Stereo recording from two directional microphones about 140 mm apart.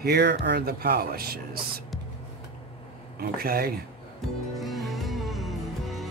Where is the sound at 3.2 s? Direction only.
90° right.